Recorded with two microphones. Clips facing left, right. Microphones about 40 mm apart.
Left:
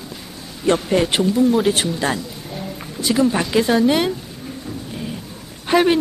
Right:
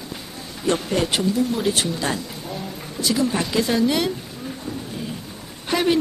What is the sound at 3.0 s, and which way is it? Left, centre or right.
A woman's voice, left.